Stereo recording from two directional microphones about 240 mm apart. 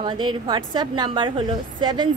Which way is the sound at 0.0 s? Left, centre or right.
Centre.